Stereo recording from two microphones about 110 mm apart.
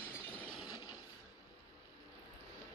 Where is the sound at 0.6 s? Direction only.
40° left (ahead or behind).